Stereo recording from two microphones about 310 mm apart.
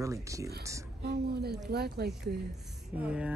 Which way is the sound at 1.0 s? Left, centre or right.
Right.